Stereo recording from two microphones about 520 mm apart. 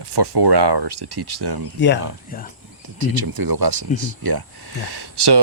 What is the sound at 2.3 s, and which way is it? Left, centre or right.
Speech, centre.